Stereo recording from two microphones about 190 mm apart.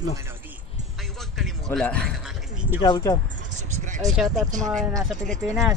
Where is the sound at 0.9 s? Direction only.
Centre (ahead or behind).